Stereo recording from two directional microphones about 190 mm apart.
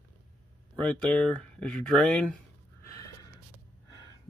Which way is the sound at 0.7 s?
5° left (ahead or behind).